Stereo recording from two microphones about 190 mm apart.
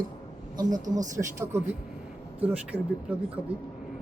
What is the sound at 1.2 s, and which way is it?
A man's voice, 15° right (ahead or behind).